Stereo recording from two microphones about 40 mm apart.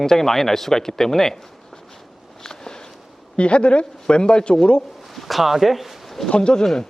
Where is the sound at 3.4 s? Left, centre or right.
Left.